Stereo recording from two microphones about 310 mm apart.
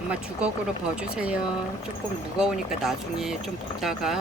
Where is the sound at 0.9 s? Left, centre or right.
Centre.